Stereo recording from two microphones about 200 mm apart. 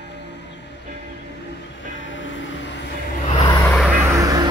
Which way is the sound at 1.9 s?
70° left (ahead or behind).